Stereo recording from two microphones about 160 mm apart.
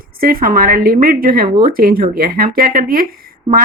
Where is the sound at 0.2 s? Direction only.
65° right (ahead or behind).